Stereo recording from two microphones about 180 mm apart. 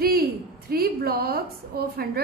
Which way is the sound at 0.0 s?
55° right (ahead or behind).